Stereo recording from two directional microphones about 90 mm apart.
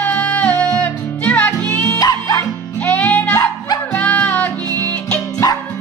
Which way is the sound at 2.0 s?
40° left (ahead or behind).